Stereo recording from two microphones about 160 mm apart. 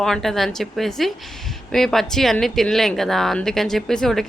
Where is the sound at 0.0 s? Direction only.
Centre (ahead or behind).